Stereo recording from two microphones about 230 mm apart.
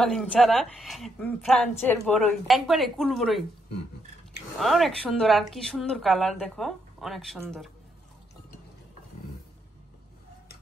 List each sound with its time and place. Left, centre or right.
0.0 s a woman's voice: centre
4.6 s a woman's voice: centre